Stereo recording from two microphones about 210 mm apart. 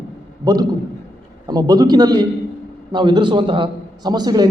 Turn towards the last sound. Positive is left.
turn(degrees=-20)  # may be behind; listen again after turning